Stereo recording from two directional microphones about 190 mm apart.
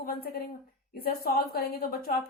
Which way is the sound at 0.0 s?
55° left (ahead or behind).